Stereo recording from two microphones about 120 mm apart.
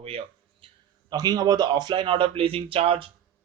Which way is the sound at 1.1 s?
35° right (ahead or behind).